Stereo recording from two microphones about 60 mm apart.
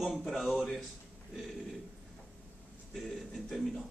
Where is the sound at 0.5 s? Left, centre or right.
Centre.